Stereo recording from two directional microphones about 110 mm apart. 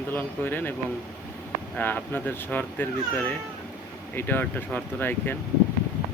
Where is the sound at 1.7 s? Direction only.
15° left (ahead or behind).